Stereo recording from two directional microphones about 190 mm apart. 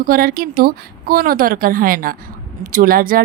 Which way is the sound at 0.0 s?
50° right (ahead or behind).